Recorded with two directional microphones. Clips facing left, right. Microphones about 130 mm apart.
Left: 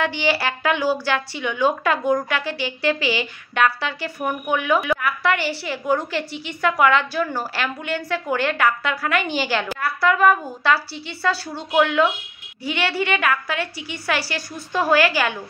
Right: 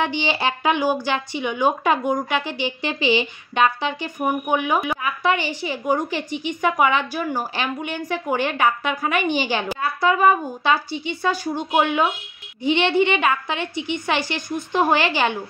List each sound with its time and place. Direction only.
0.0 s a woman's voice: 20° right (ahead or behind)